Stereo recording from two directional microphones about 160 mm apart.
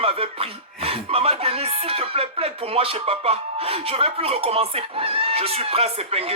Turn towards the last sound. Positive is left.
turn(degrees=-40)  # may be behind; listen again after turning